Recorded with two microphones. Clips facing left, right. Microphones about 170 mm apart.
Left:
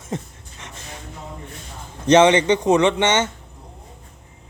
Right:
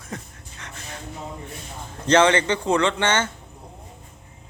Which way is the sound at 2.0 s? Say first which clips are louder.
Left 4 dB; 20° left (ahead or behind).